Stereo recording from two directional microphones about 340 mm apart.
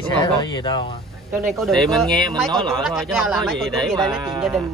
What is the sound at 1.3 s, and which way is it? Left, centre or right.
Speech, centre.